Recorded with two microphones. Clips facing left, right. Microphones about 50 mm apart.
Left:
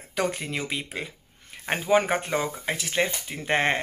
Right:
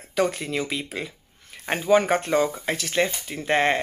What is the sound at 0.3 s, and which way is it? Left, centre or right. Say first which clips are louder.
Speech: right 3 dB; left.